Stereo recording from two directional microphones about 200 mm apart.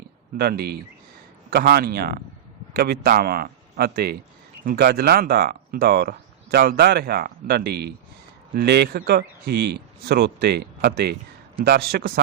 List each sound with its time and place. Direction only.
0.3 s speech: 50° right (ahead or behind)